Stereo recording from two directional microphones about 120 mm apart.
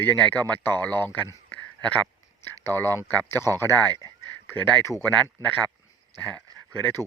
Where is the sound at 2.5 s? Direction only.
20° left (ahead or behind).